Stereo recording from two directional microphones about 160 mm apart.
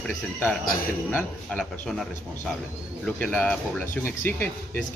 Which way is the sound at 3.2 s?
10° left (ahead or behind).